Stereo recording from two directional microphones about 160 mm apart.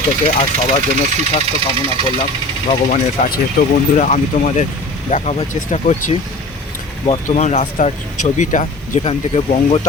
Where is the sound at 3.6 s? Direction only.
75° left (ahead or behind).